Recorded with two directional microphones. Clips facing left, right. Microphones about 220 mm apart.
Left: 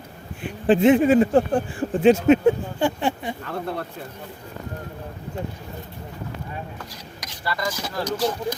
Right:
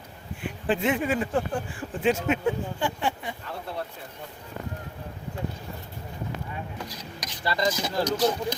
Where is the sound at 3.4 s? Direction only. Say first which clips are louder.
Left 5 dB; 55° left (ahead or behind).